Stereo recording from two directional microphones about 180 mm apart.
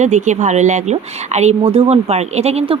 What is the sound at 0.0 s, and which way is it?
Speech, 40° right (ahead or behind).